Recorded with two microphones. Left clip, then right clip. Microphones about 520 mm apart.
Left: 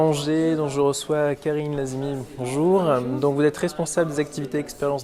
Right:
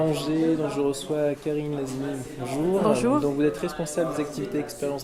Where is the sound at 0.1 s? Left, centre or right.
Left.